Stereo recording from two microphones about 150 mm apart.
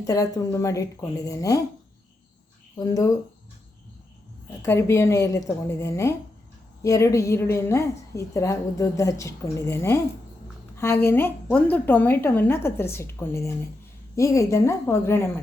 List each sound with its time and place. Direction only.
0.0 s a woman's voice: 25° left (ahead or behind)
2.7 s a woman's voice: 25° left (ahead or behind)
4.6 s a woman's voice: 20° left (ahead or behind)